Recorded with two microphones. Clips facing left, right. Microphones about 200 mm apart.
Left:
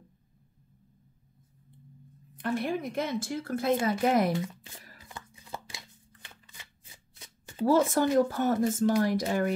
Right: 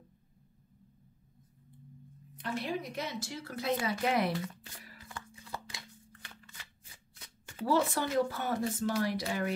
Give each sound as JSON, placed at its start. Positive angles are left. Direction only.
{"t": 2.3, "sound": "a woman's voice", "side_deg": 50}
{"t": 5.0, "sound": "shuffling cards", "side_deg": 20}
{"t": 7.6, "sound": "a woman's voice", "side_deg": 45}